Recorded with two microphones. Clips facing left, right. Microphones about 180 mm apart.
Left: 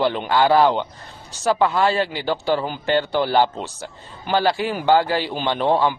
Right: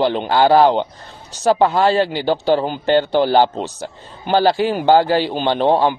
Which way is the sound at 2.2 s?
25° right (ahead or behind).